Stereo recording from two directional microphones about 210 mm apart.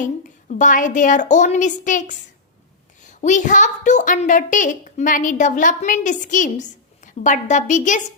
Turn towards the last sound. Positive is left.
turn(degrees=35)  # may be behind; listen again after turning